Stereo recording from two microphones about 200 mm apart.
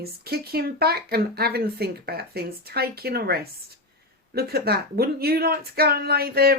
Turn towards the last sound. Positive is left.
turn(degrees=-50)  # may be behind; listen again after turning